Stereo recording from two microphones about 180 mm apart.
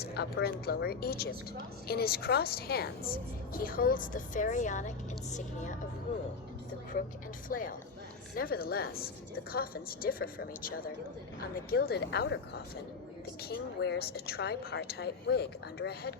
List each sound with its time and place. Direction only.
0.0 s a woman's voice: 60° left (ahead or behind); by 5.7 s 40° left (ahead or behind)
7.4 s a woman's voice: 50° left (ahead or behind)